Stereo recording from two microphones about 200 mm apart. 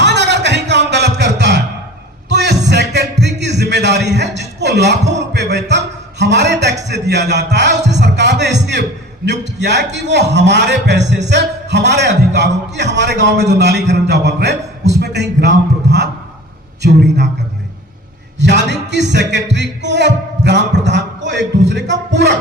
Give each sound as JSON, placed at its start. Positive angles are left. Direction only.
{"t": 0.0, "sound": "a sound", "side_deg": -60}
{"t": 2.3, "sound": "music", "side_deg": -55}
{"t": 6.8, "sound": "a man's voice", "side_deg": -60}
{"t": 18.3, "sound": "music", "side_deg": -60}
{"t": 20.8, "sound": "a sound", "side_deg": -60}
{"t": 21.7, "sound": "music", "side_deg": -60}